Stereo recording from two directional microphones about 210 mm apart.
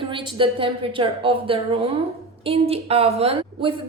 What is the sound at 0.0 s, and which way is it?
A woman's voice, 25° right (ahead or behind).